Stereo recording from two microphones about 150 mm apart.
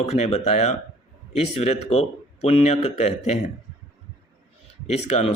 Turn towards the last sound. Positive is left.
turn(degrees=45)  # may be behind; listen again after turning